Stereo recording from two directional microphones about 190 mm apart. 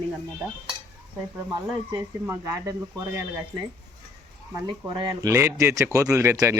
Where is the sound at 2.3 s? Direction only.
15° right (ahead or behind).